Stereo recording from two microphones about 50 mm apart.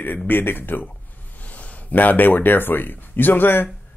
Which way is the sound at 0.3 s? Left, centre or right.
Left.